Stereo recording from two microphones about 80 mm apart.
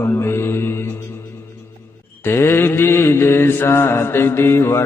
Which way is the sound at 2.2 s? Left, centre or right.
Left.